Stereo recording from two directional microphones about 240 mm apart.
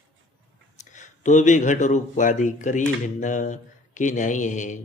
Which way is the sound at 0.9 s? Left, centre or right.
Left.